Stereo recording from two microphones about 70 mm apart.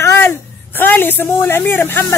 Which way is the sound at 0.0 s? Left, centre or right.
Left.